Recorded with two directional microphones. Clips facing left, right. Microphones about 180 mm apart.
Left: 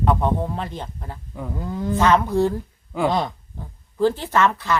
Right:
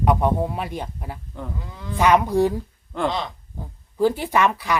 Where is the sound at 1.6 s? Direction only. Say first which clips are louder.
Left 10 dB; 45° left (ahead or behind).